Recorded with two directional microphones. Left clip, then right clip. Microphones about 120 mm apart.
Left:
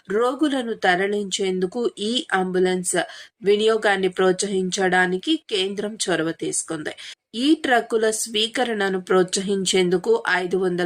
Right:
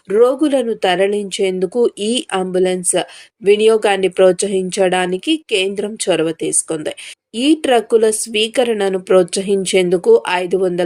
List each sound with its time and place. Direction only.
0.1 s speech: 20° right (ahead or behind)